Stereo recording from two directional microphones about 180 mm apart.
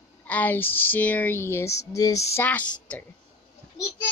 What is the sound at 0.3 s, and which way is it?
Speech, 10° left (ahead or behind).